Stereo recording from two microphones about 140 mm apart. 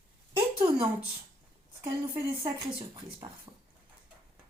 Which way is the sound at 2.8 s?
35° right (ahead or behind).